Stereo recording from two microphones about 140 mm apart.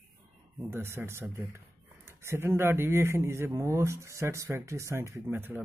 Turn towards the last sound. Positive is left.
turn(degrees=-15)  # may be behind; listen again after turning